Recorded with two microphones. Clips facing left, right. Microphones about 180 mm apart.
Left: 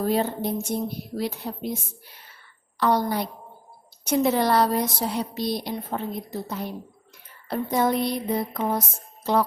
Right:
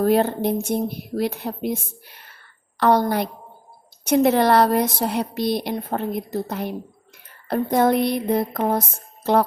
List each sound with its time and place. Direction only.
0.0 s speech: 60° right (ahead or behind)